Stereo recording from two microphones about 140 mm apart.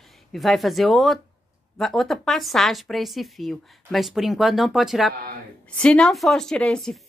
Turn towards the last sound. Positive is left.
turn(degrees=5)  # may be behind; listen again after turning